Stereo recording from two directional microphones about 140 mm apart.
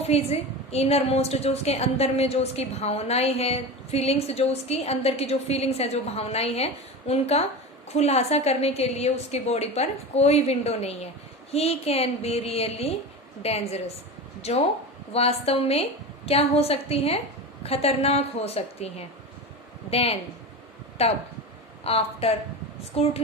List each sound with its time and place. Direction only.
0.1 s a woman's voice: 50° left (ahead or behind)